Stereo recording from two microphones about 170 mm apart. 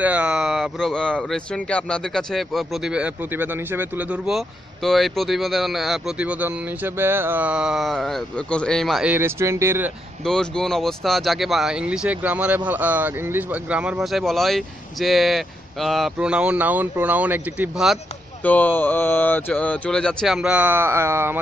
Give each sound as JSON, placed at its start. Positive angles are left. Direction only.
{"t": 0.0, "sound": "speech", "side_deg": -5}
{"t": 10.2, "sound": "speech", "side_deg": 5}
{"t": 18.4, "sound": "speech", "side_deg": 10}